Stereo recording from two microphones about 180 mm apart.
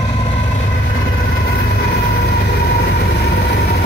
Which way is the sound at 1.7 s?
65° left (ahead or behind).